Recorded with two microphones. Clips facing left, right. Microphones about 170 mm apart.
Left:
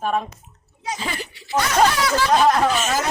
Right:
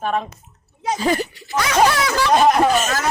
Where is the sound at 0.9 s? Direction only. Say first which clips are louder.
Right 12 dB; 45° right (ahead or behind).